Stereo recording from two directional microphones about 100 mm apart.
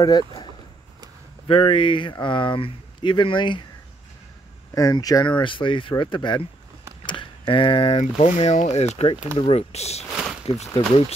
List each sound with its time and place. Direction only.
0.0 s speech: 45° left (ahead or behind)
1.5 s speech: 60° left (ahead or behind)
4.7 s speech: 40° left (ahead or behind)
5.3 s speech: 55° left (ahead or behind); by 10.0 s 90° left
10.1 s a sound: 5° right (ahead or behind)